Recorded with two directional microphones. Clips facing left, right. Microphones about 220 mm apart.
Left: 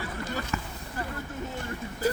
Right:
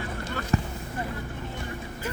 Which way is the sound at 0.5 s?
35° right (ahead or behind).